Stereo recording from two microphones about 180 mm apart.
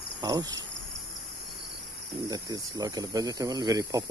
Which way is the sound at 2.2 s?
20° right (ahead or behind).